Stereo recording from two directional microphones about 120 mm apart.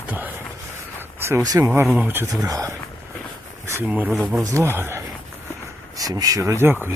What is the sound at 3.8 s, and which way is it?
Speech, 10° right (ahead or behind).